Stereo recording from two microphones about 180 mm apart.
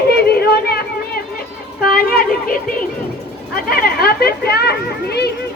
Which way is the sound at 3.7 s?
55° left (ahead or behind).